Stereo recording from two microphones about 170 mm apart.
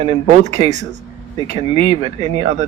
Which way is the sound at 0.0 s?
35° right (ahead or behind).